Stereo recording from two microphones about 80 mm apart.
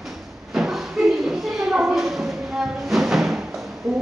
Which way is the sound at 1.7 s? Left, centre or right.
Centre.